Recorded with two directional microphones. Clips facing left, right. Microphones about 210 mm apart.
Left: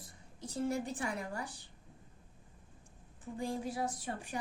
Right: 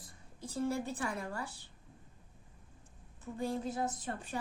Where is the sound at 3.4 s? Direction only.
15° left (ahead or behind).